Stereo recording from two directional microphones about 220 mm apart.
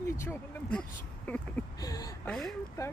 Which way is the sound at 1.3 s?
5° left (ahead or behind).